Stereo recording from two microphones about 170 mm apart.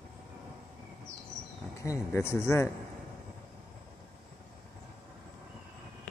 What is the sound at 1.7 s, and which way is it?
Speech, 15° left (ahead or behind).